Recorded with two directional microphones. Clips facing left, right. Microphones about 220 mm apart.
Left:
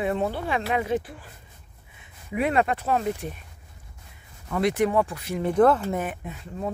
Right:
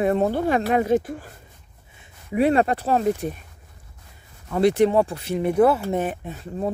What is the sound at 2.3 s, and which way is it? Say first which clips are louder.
Speech: right 5 dB; 35° right (ahead or behind).